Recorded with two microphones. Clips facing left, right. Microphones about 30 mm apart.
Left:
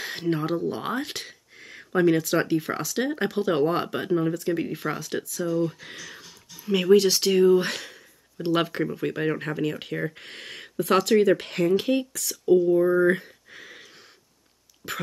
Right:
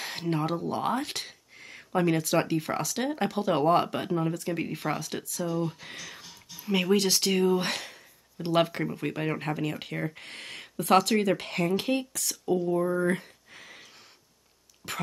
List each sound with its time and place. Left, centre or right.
0.3 s speech: centre
12.8 s speech: centre
13.2 s a sound: centre
14.8 s speech: centre